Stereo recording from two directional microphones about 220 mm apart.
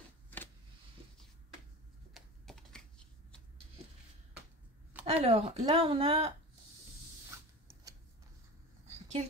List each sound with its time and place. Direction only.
2.1 s typing: centre (ahead or behind)
5.0 s speech: 25° right (ahead or behind)
7.3 s a sound: 10° right (ahead or behind)